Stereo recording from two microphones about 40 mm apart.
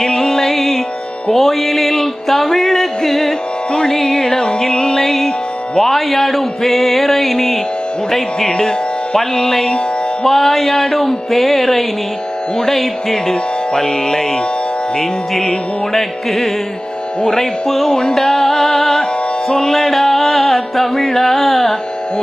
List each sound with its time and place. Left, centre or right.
0.0 s music: centre
3.7 s music: centre